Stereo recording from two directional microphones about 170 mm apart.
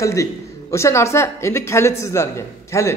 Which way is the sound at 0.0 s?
20° left (ahead or behind).